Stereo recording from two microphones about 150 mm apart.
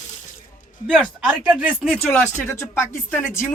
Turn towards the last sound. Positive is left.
turn(degrees=15)  # may be behind; listen again after turning